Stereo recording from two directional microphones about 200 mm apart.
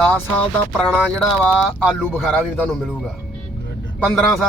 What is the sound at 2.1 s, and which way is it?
Speech, centre (ahead or behind).